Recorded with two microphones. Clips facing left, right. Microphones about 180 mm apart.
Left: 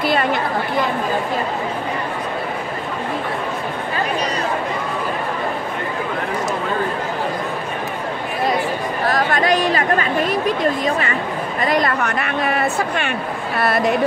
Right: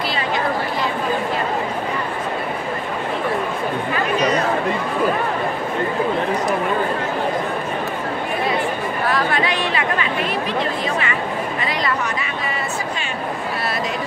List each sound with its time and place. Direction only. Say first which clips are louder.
0.1 s chatter: left 3 dB; 55° left (ahead or behind)
9.0 s chatter: left 2 dB; 40° left (ahead or behind)
11.6 s speech: left 8 dB; 50° left (ahead or behind)